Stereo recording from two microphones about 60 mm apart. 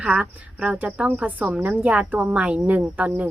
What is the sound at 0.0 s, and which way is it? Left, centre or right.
A woman's voice, centre.